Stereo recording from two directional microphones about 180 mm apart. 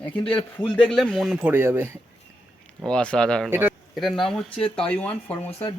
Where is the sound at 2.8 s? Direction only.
5° left (ahead or behind).